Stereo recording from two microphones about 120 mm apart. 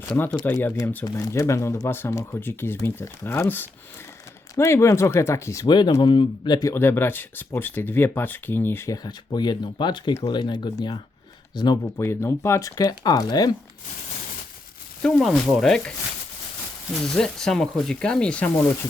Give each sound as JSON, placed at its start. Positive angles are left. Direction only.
{"t": 0.4, "sound": "speech", "side_deg": 15}
{"t": 1.0, "sound": "speech", "side_deg": 30}
{"t": 5.6, "sound": "speech", "side_deg": 35}
{"t": 6.7, "sound": "speech", "side_deg": 20}
{"t": 9.0, "sound": "speech", "side_deg": 35}
{"t": 11.9, "sound": "speech", "side_deg": 20}
{"t": 15.0, "sound": "speech", "side_deg": 5}